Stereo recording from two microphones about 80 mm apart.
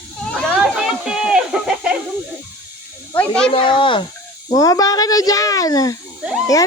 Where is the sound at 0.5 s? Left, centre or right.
Centre.